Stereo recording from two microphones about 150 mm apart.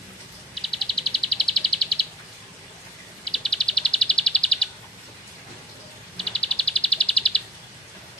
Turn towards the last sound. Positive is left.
turn(degrees=5)  # may be behind; listen again after turning